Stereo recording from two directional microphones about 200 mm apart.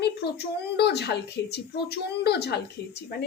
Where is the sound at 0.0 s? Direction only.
55° left (ahead or behind).